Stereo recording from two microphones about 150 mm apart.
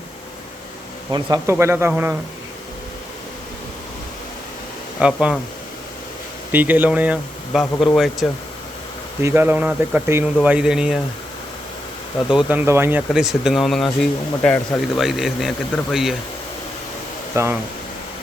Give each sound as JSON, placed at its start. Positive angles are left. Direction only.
{"t": 1.1, "sound": "speech", "side_deg": -20}
{"t": 4.9, "sound": "speech", "side_deg": -5}
{"t": 6.5, "sound": "speech", "side_deg": -10}
{"t": 9.2, "sound": "speech", "side_deg": -15}
{"t": 12.3, "sound": "speech", "side_deg": -10}
{"t": 13.0, "sound": "speech", "side_deg": -5}
{"t": 17.3, "sound": "speech", "side_deg": -20}